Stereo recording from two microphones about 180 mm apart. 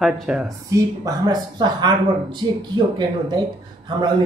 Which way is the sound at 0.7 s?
20° right (ahead or behind).